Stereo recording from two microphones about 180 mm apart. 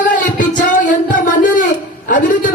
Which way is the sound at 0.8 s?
45° left (ahead or behind).